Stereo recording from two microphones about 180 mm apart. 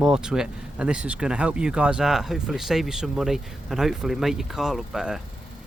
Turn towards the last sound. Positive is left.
turn(degrees=0)  # may be behind; listen again after turning